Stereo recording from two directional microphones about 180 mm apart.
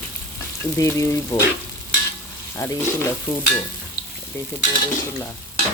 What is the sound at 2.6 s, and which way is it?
Speech, 15° left (ahead or behind).